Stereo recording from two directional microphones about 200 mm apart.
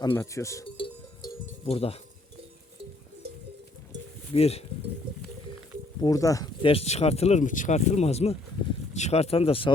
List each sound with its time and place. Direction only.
0.1 s cowbell: 15° left (ahead or behind)
1.6 s speech: 30° left (ahead or behind)
4.4 s speech: 30° left (ahead or behind)
6.0 s speech: 15° left (ahead or behind)